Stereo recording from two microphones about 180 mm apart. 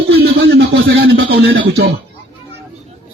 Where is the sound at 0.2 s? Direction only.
85° right.